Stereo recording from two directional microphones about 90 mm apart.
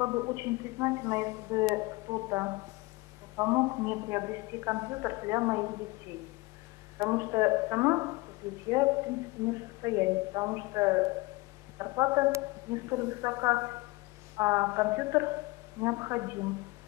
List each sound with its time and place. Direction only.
0.0 s speech: 35° right (ahead or behind)
7.0 s speech: 35° right (ahead or behind)